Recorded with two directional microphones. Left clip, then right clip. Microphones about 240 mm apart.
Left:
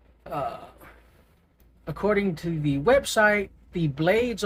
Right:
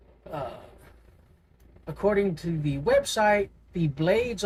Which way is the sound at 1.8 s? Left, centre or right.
Left.